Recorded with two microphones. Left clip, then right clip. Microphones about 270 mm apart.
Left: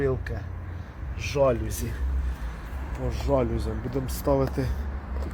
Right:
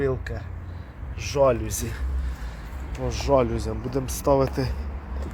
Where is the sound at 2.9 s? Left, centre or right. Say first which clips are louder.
Right 4 dB; centre.